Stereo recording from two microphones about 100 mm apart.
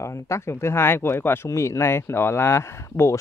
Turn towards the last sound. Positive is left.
turn(degrees=30)  # may be behind; listen again after turning